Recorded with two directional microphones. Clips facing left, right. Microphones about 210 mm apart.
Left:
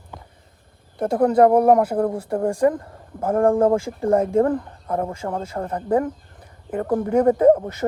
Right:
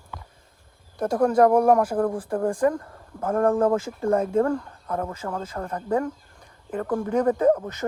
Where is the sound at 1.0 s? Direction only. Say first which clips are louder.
Left 3 dB; 25° left (ahead or behind).